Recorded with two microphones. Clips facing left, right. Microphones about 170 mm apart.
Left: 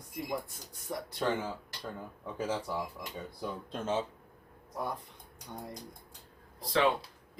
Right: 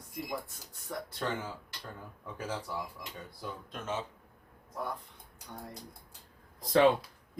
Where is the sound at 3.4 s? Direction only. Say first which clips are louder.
Left 4 dB; 30° left (ahead or behind).